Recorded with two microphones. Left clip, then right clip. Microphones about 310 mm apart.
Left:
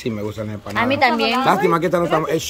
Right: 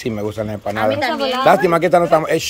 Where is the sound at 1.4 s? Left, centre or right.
Centre.